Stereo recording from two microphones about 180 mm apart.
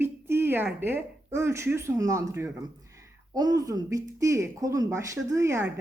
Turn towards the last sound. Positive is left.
turn(degrees=-15)  # may be behind; listen again after turning